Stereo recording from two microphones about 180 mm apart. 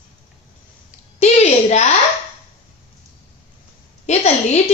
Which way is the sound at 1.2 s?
40° left (ahead or behind).